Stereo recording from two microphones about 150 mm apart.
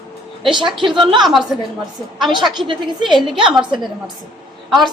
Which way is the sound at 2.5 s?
30° right (ahead or behind).